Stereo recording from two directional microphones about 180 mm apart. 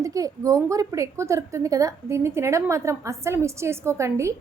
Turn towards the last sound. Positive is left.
turn(degrees=-15)  # may be behind; listen again after turning